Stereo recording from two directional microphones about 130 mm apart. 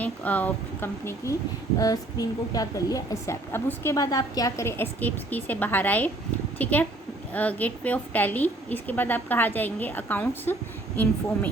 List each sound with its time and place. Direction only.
0.0 s a woman's voice: 10° left (ahead or behind)